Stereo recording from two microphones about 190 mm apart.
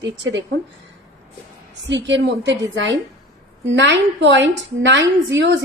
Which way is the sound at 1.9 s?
70° right (ahead or behind).